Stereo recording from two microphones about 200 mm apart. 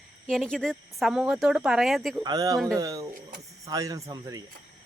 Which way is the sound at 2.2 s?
20° right (ahead or behind).